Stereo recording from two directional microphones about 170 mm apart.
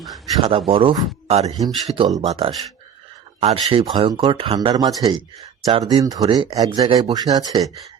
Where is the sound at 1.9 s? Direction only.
25° right (ahead or behind).